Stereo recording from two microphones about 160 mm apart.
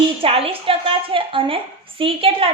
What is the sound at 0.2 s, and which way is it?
A woman's voice, 35° right (ahead or behind).